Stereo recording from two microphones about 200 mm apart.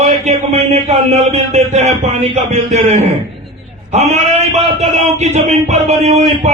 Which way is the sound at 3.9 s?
35° right (ahead or behind).